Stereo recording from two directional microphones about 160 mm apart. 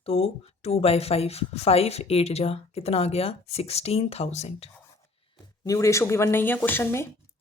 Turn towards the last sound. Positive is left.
turn(degrees=15)  # may be behind; listen again after turning